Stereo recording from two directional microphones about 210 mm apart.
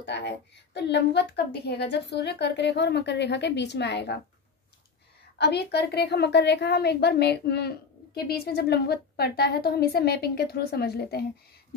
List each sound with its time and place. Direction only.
0.0 s a woman's voice: 55° left (ahead or behind)
5.4 s a woman's voice: 50° left (ahead or behind)